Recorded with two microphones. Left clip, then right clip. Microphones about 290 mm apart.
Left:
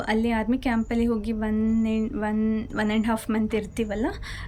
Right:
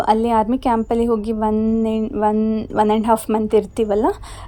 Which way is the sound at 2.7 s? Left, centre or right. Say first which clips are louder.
Right 13 dB; centre.